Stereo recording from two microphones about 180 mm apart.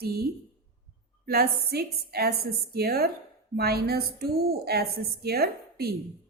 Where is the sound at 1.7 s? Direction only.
60° right (ahead or behind).